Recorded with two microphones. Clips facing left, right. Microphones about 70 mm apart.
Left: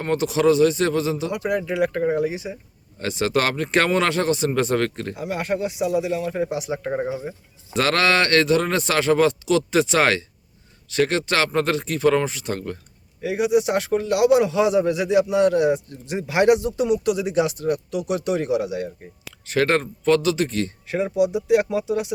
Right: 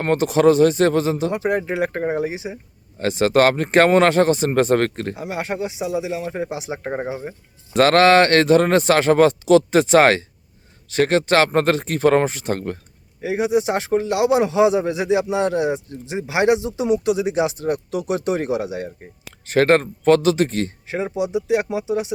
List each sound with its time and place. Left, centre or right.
0.0 s a man's voice: right
3.0 s a man's voice: right
5.1 s a man's voice: right
7.8 s a man's voice: right
13.2 s a man's voice: right
17.9 s a man's voice: right
19.5 s a man's voice: right; by 22.0 s centre